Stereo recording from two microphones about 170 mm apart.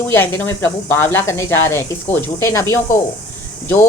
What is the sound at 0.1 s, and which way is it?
Speech, 15° left (ahead or behind).